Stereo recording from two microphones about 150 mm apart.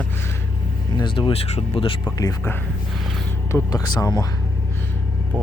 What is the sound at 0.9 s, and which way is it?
Speech, 30° left (ahead or behind).